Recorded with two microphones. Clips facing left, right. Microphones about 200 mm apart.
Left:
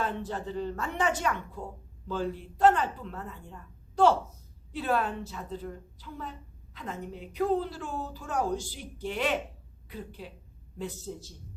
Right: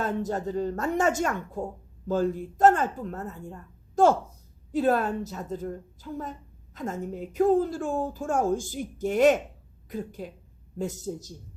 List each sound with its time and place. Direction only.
0.0 s a woman's voice: 45° right (ahead or behind)